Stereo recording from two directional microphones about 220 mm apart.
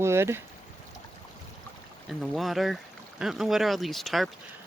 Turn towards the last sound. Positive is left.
turn(degrees=0)  # may be behind; listen again after turning